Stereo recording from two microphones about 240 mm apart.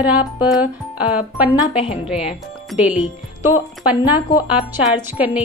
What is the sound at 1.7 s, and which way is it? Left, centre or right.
Speech, left.